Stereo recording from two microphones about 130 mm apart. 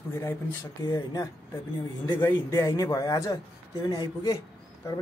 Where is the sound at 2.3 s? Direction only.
25° left (ahead or behind).